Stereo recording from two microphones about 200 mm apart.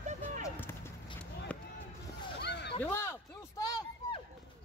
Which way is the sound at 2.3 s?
55° left (ahead or behind).